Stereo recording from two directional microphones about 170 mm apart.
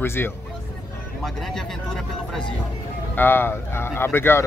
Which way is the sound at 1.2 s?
Centre (ahead or behind).